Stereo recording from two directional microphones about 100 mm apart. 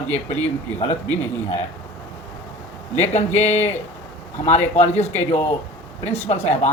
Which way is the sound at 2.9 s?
90° left.